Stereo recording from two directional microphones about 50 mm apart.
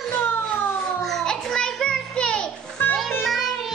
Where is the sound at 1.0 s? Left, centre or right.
Centre.